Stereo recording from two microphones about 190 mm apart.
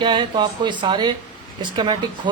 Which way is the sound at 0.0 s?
25° right (ahead or behind).